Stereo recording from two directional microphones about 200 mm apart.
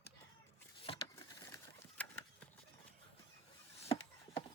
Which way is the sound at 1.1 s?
15° left (ahead or behind).